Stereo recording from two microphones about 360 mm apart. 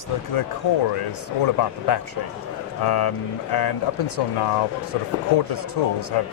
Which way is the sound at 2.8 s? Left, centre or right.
Left.